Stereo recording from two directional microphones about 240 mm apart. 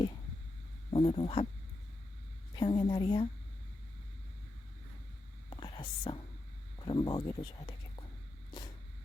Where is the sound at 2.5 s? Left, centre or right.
Centre.